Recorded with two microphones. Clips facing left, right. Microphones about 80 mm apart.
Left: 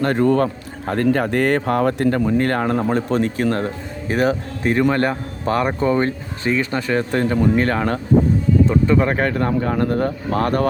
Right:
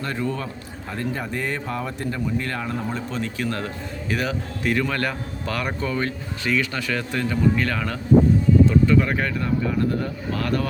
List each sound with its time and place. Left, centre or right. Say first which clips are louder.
0.0 s a man's voice: left 11 dB; left